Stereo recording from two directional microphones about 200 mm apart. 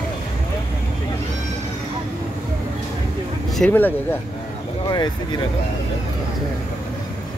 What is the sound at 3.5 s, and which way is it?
Speech, 5° left (ahead or behind).